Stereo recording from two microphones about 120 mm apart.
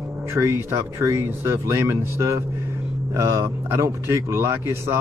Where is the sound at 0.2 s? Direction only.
25° right (ahead or behind).